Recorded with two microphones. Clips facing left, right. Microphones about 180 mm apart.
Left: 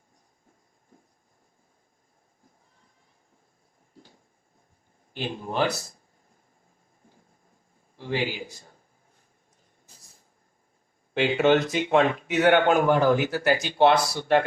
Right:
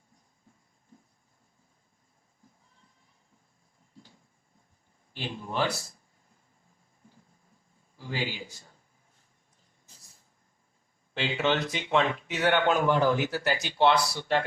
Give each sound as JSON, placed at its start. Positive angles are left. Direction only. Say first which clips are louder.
{"t": 5.1, "sound": "speech", "louder": "left 4 dB", "side_deg": 45}
{"t": 7.9, "sound": "a man's voice", "louder": "left 6 dB", "side_deg": 35}
{"t": 11.1, "sound": "speech", "louder": "left 7 dB", "side_deg": 50}